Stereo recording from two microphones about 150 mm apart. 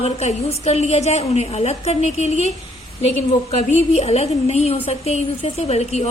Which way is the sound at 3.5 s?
45° left (ahead or behind).